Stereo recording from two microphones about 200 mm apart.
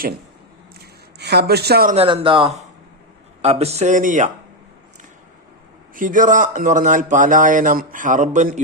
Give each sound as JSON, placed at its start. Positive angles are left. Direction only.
{"t": 1.2, "sound": "speech", "side_deg": -55}
{"t": 2.0, "sound": "speech", "side_deg": -25}
{"t": 5.9, "sound": "speech", "side_deg": -40}